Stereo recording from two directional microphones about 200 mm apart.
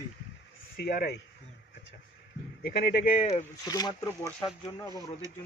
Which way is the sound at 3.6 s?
20° left (ahead or behind).